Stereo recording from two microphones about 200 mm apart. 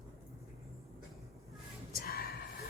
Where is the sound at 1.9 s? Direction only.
50° left (ahead or behind).